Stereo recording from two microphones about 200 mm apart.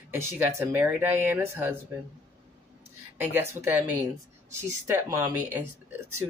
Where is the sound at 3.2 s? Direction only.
10° right (ahead or behind).